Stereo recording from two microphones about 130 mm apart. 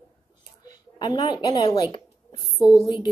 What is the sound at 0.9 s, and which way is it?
A woman's voice, 30° left (ahead or behind).